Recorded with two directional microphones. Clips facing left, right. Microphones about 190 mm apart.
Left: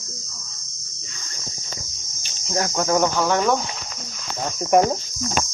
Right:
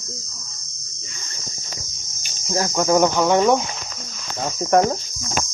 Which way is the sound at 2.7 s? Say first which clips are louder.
Right 4 dB; 5° right (ahead or behind).